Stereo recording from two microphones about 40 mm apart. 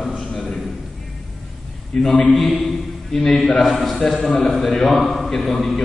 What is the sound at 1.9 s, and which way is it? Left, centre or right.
A man's voice, centre.